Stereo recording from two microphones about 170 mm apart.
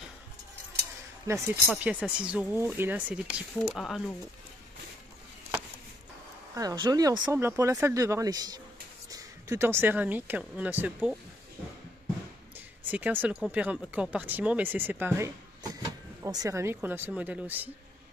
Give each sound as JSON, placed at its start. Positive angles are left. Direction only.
{"t": 1.3, "sound": "speech", "side_deg": -15}
{"t": 6.5, "sound": "speech", "side_deg": -20}
{"t": 12.5, "sound": "a sound", "side_deg": -10}
{"t": 13.5, "sound": "speech", "side_deg": -10}